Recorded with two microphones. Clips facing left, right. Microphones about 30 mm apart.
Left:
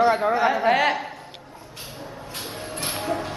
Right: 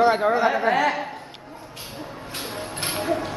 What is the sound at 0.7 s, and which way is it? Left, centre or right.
Speech, left.